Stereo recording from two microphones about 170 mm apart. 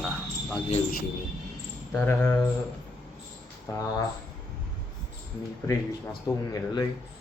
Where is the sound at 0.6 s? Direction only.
35° left (ahead or behind).